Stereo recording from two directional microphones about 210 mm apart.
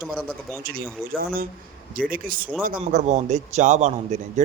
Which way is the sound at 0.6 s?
45° right (ahead or behind).